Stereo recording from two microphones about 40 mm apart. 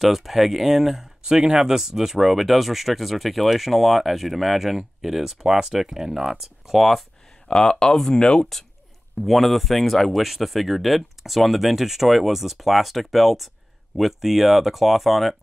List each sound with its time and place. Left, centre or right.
0.0 s speech: centre
7.4 s speech: centre
9.2 s speech: centre